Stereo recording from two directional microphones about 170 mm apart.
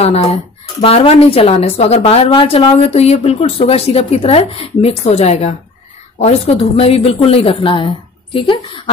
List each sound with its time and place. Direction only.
0.0 s speech: 35° left (ahead or behind)